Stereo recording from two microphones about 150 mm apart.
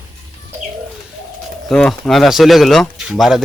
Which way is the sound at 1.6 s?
5° left (ahead or behind).